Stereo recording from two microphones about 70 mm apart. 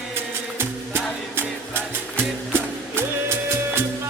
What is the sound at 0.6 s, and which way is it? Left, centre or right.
Music, right.